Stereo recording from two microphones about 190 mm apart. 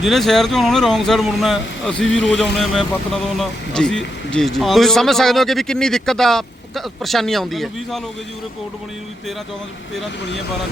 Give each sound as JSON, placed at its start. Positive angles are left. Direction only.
{"t": 0.0, "sound": "speech", "side_deg": 0}
{"t": 2.0, "sound": "speech", "side_deg": 75}
{"t": 2.4, "sound": "speech", "side_deg": 0}